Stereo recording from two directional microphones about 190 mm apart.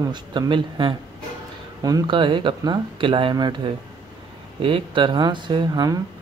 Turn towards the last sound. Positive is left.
turn(degrees=-20)  # may be behind; listen again after turning